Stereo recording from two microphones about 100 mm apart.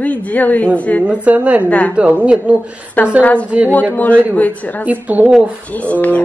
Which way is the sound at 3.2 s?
15° left (ahead or behind).